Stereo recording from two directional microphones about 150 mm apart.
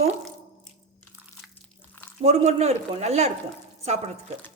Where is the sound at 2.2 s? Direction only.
45° right (ahead or behind).